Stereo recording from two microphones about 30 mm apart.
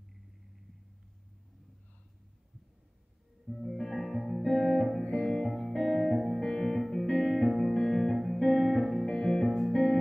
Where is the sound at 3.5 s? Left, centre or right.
Centre.